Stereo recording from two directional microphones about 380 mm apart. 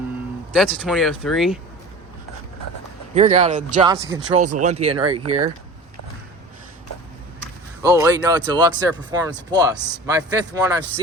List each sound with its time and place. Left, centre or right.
0.5 s speech: centre
3.2 s speech: centre
7.8 s speech: centre